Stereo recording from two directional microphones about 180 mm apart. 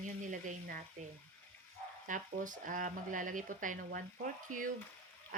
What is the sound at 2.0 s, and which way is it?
A woman's voice, 45° right (ahead or behind).